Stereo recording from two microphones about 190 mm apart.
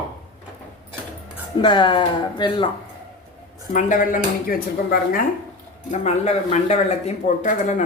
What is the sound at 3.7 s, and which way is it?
Speech, 45° left (ahead or behind).